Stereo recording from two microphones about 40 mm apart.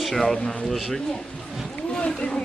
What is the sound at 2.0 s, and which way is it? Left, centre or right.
Speech, left.